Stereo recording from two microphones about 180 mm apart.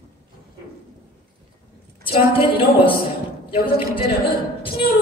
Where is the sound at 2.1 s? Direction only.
30° left (ahead or behind).